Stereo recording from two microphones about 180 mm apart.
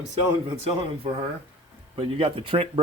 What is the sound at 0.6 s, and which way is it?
A man's voice, 35° right (ahead or behind).